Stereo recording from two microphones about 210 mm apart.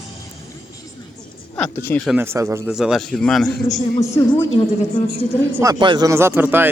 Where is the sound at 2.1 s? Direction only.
10° right (ahead or behind).